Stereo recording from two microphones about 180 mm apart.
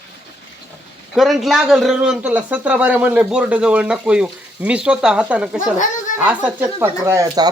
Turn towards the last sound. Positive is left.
turn(degrees=-20)  # may be behind; listen again after turning